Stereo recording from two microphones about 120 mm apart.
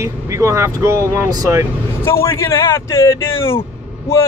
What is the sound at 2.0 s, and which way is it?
Speech, 20° left (ahead or behind).